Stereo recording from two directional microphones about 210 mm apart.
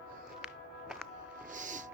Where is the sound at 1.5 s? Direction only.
35° right (ahead or behind).